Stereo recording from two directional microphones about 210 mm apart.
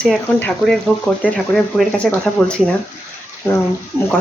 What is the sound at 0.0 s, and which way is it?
Speech, 5° left (ahead or behind).